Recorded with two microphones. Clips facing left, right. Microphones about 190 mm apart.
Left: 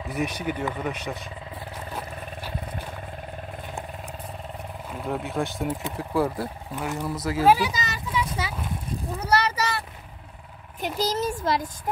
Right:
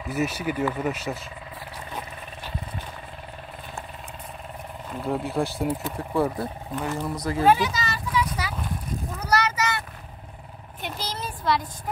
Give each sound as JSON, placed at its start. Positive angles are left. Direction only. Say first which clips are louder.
{"t": 0.1, "sound": "speech", "louder": "right 2 dB", "side_deg": -5}
{"t": 4.9, "sound": "speech", "louder": "right 2 dB", "side_deg": 0}
{"t": 7.2, "sound": "a sound", "louder": "even", "side_deg": 5}
{"t": 11.0, "sound": "speech", "louder": "left 11 dB", "side_deg": 45}